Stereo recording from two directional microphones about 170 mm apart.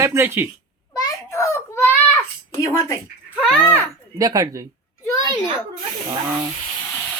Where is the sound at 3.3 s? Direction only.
Centre (ahead or behind).